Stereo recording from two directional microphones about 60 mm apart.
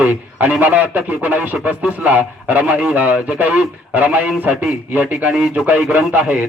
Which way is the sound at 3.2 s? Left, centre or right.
Right.